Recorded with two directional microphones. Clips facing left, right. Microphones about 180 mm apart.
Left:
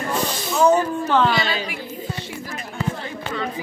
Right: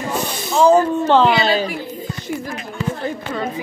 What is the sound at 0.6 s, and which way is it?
A woman's voice, 30° right (ahead or behind).